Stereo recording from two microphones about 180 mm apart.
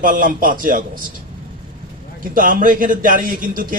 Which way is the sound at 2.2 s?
50° right (ahead or behind).